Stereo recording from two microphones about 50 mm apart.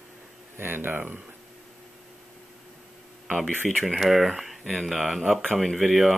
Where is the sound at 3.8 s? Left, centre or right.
Centre.